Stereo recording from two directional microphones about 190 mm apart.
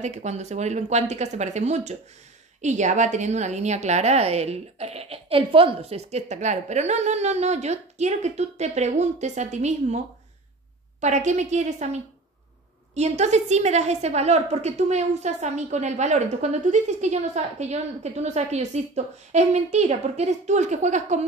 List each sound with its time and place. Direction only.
0.0 s a woman's voice: 35° right (ahead or behind)
11.0 s a woman's voice: 40° right (ahead or behind)